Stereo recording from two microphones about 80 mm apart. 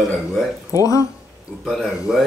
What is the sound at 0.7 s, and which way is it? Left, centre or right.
Speech, left.